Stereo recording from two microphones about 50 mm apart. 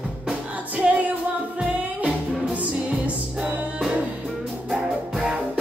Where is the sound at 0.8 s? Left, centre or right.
Right.